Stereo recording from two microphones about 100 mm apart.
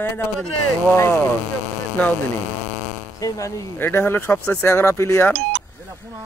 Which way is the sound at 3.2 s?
35° left (ahead or behind).